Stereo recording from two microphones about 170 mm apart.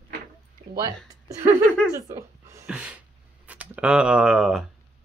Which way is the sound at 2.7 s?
5° right (ahead or behind).